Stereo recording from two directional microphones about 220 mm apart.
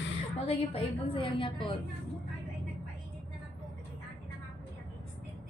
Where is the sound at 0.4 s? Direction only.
25° left (ahead or behind).